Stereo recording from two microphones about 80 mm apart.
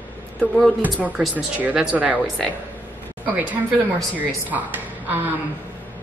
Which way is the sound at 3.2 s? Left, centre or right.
Centre.